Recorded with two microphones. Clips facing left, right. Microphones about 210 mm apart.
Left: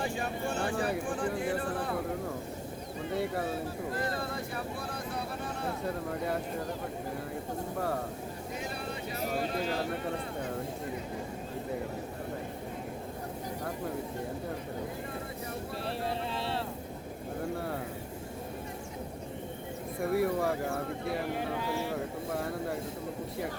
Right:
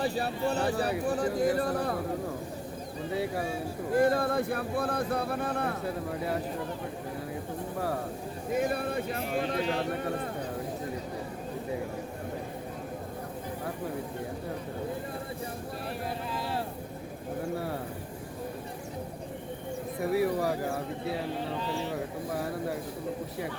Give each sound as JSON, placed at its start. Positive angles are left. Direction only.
{"t": 0.0, "sound": "speech", "side_deg": -35}
{"t": 1.5, "sound": "a sound", "side_deg": -40}
{"t": 3.1, "sound": "speech", "side_deg": -5}
{"t": 4.1, "sound": "speech", "side_deg": -55}
{"t": 5.8, "sound": "speech", "side_deg": -5}
{"t": 8.5, "sound": "speech", "side_deg": -55}
{"t": 16.0, "sound": "vehicle", "side_deg": 25}
{"t": 20.0, "sound": "speech", "side_deg": 0}
{"t": 21.3, "sound": "speech", "side_deg": 10}
{"t": 22.3, "sound": "speech", "side_deg": 0}